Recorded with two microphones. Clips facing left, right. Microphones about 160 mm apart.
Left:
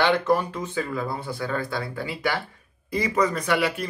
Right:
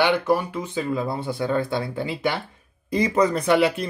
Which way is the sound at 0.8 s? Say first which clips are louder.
Right 4 dB; 25° right (ahead or behind).